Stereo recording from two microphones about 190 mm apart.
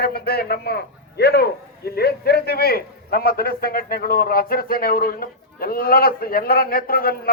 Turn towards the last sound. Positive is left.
turn(degrees=50)  # may be behind; listen again after turning